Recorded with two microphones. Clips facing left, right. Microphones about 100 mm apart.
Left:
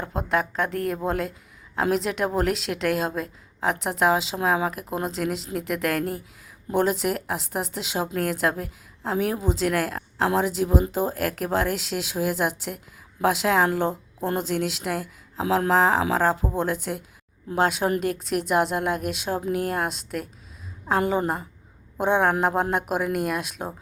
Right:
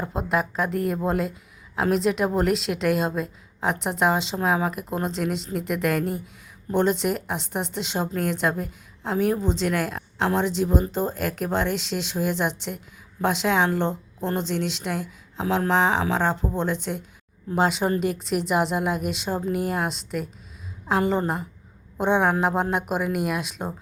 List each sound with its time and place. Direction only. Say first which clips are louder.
0.0 s a woman's voice: even; centre (ahead or behind)